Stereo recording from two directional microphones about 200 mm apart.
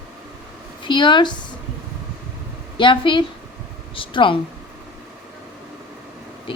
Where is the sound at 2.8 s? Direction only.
25° left (ahead or behind).